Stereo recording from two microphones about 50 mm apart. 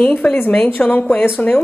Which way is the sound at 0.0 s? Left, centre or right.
Left.